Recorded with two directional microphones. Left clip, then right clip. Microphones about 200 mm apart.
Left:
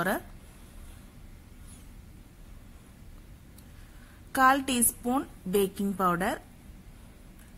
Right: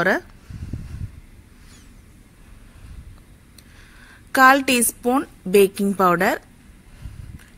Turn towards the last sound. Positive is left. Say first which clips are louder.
# right 10 dB
turn(degrees=-20)  # may be behind; listen again after turning